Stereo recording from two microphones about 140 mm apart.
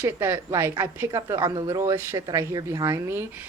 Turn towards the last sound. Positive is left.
turn(degrees=-15)  # may be behind; listen again after turning